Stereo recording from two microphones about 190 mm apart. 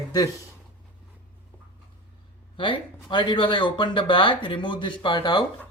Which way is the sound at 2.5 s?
25° left (ahead or behind).